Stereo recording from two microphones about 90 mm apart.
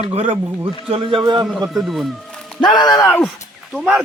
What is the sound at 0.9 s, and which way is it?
Speech, 75° right (ahead or behind).